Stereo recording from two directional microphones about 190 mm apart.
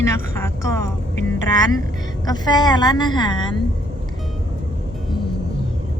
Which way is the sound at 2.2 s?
20° left (ahead or behind).